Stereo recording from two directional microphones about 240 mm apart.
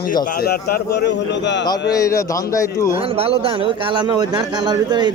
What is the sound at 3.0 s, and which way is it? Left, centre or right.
A man's voice, right.